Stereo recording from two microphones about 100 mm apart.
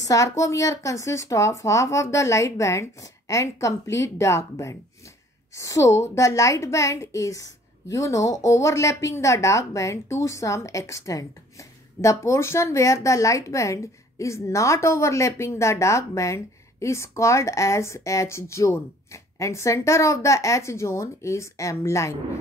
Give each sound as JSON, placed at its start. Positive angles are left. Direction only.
{"t": 0.0, "sound": "a woman's voice", "side_deg": 35}